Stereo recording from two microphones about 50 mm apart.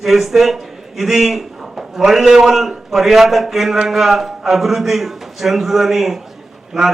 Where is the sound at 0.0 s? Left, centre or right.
Centre.